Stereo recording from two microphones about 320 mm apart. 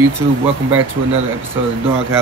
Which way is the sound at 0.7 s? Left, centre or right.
Right.